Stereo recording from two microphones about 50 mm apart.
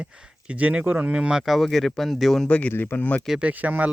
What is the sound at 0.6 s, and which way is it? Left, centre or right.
Speech, right.